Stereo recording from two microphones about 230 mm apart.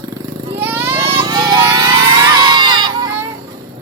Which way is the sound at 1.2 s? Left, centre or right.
Centre.